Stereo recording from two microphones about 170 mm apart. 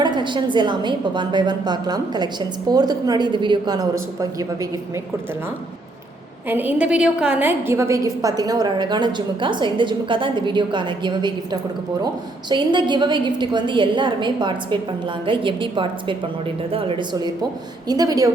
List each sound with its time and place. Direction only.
0.0 s a woman's voice: 25° right (ahead or behind)
6.5 s a woman's voice: 10° right (ahead or behind); by 11.3 s 25° right (ahead or behind)
12.5 s a woman's voice: 25° right (ahead or behind)